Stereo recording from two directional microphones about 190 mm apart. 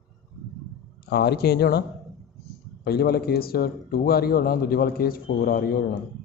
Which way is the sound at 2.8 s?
55° left (ahead or behind).